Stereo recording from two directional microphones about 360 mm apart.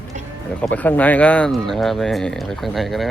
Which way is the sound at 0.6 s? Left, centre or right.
Centre.